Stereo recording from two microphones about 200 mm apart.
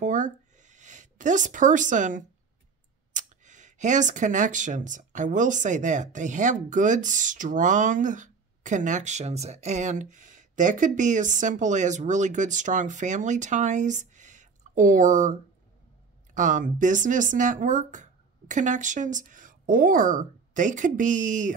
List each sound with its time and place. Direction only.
0.0 s a sound: 40° right (ahead or behind)
3.1 s speech: 40° right (ahead or behind)
16.3 s speech: 40° right (ahead or behind)